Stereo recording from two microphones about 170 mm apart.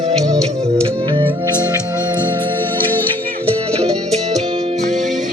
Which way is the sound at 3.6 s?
35° right (ahead or behind).